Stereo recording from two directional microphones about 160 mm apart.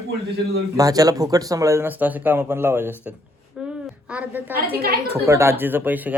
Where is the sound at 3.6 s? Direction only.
5° right (ahead or behind).